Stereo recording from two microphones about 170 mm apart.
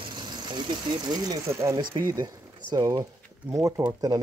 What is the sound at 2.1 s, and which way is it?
Speech, 20° right (ahead or behind).